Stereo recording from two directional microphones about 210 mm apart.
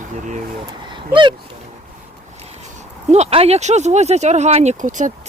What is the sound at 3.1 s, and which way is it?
Speech, 30° right (ahead or behind).